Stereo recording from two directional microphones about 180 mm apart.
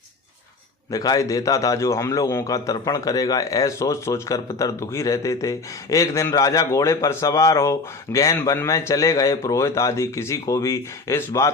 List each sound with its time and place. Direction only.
0.9 s a man's voice: 20° left (ahead or behind)